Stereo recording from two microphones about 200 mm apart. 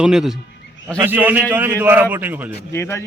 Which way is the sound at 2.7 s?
15° left (ahead or behind).